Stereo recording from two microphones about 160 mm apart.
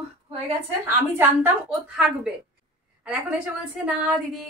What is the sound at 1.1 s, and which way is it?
A woman's voice, 10° right (ahead or behind).